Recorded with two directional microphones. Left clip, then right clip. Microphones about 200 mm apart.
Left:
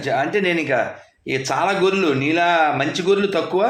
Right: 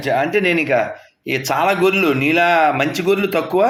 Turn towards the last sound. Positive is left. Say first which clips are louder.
# right 2 dB
turn(degrees=-35)  # may be behind; listen again after turning